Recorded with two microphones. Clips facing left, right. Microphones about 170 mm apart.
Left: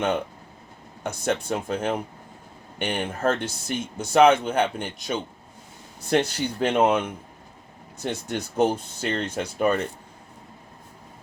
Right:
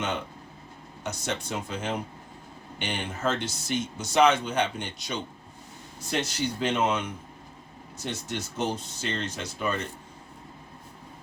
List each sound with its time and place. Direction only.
1.0 s speech: 55° left (ahead or behind)